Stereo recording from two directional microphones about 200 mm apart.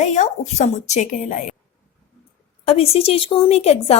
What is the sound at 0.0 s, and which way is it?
A woman's voice, 35° left (ahead or behind).